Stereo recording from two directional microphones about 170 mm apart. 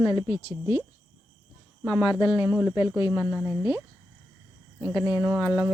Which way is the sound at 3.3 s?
Centre (ahead or behind).